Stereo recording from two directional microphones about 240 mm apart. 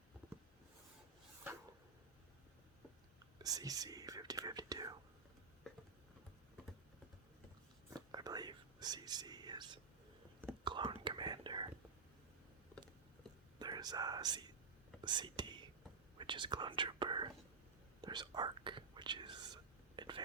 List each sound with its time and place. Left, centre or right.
3.3 s speech: centre
7.9 s whispering: centre
13.6 s whispering: centre